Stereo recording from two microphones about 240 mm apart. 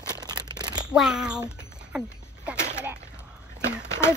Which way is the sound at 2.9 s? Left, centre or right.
Centre.